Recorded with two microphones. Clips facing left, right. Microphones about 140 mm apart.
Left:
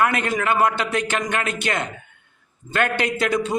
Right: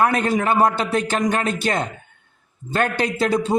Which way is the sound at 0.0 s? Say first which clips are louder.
Right 2 dB; 35° right (ahead or behind).